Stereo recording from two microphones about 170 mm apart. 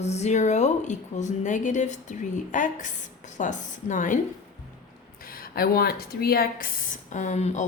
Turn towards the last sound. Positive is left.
turn(degrees=45)  # may be behind; listen again after turning